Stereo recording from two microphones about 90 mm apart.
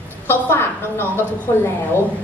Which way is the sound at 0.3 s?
25° left (ahead or behind).